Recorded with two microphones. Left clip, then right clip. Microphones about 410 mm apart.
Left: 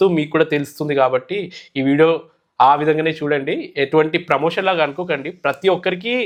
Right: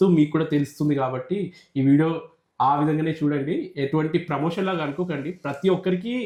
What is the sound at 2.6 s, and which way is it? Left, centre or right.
Speech, left.